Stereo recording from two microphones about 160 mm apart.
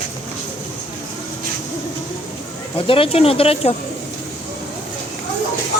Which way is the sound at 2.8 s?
35° left (ahead or behind).